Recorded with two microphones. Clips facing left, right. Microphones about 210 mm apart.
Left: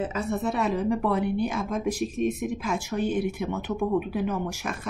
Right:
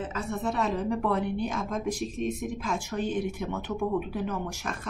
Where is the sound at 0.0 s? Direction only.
5° left (ahead or behind).